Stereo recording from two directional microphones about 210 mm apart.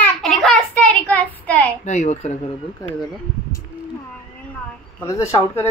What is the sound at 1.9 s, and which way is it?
Speech, 35° left (ahead or behind).